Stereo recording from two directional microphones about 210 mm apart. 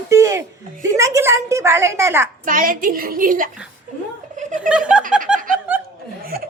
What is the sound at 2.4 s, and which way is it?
A woman's voice, 40° right (ahead or behind).